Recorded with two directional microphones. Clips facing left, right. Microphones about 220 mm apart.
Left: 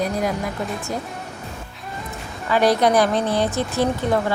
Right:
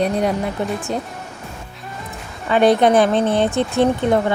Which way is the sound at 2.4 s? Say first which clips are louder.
Right 4 dB; 25° right (ahead or behind).